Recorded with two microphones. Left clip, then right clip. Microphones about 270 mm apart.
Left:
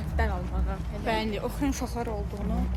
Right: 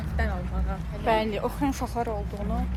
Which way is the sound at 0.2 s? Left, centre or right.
Centre.